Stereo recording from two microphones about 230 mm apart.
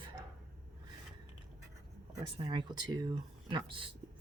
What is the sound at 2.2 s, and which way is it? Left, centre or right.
Speech, right.